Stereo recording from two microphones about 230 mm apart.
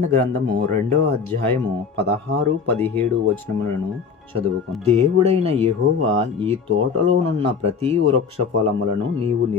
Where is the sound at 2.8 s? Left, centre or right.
Centre.